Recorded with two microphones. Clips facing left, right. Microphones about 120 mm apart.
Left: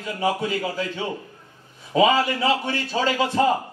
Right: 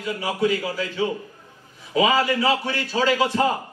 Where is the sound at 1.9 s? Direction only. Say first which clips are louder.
Left 1 dB; 30° left (ahead or behind).